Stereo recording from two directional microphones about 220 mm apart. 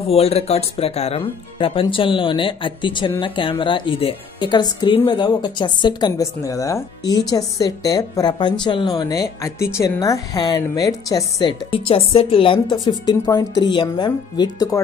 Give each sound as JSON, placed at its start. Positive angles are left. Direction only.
{"t": 0.1, "sound": "a woman's voice", "side_deg": 30}